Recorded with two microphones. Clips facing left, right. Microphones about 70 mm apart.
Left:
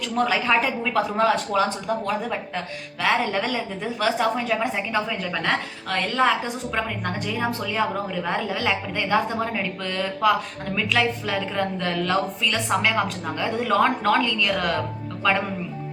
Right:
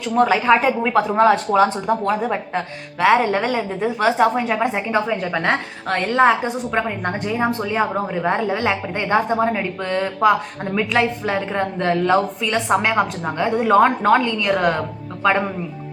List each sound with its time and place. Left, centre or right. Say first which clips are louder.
0.0 s speech: right 6 dB; right